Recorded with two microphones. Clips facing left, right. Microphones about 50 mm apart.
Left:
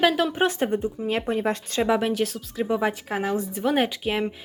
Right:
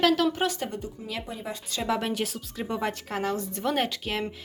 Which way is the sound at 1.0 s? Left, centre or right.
Left.